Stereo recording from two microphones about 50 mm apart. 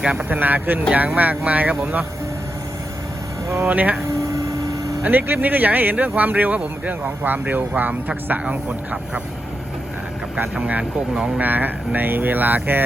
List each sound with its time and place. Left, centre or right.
0.0 s a man's voice: centre
0.3 s speech: right
3.7 s speech: right
5.0 s a man's voice: right
10.6 s speech: right